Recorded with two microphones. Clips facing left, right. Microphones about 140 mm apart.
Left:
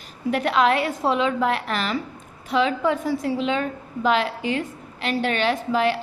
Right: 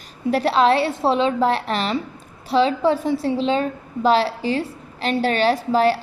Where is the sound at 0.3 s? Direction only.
35° right (ahead or behind).